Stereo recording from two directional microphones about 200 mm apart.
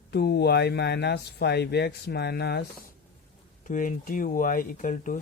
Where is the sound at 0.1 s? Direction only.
55° left (ahead or behind).